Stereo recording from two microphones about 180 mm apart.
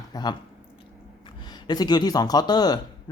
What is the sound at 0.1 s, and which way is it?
Speech, 25° left (ahead or behind).